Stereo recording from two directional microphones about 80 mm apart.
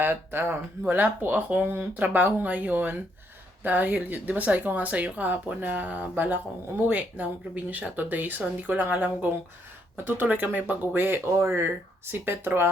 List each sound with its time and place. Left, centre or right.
0.0 s speech: right
10.1 s speech: right